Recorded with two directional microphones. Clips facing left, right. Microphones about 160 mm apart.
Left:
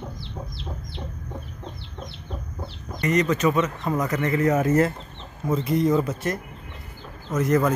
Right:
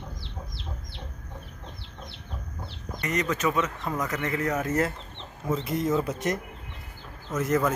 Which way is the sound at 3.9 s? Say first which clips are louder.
Left 5 dB; 10° left (ahead or behind).